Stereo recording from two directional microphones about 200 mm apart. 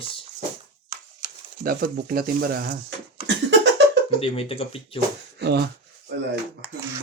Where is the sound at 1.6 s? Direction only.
50° right (ahead or behind).